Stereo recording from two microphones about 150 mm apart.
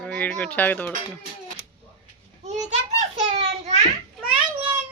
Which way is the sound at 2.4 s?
50° right (ahead or behind).